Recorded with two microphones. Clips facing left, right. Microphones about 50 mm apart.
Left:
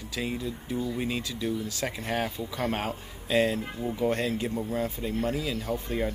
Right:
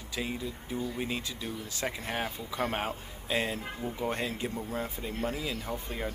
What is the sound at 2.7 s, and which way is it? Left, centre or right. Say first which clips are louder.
Speech: left 2 dB; centre.